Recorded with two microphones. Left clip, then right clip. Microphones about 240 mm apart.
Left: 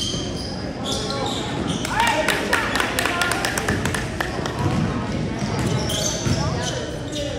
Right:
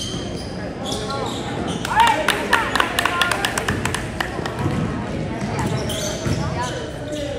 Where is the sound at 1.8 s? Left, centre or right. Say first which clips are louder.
Right 4 dB; right.